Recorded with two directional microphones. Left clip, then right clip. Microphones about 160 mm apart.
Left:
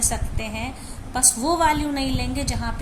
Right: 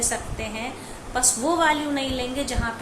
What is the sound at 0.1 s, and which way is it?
A woman's voice, 50° left (ahead or behind).